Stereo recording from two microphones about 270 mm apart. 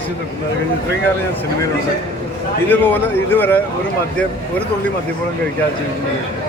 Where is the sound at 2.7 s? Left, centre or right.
Centre.